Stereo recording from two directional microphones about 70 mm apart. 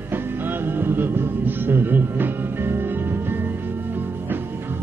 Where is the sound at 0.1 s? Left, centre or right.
Right.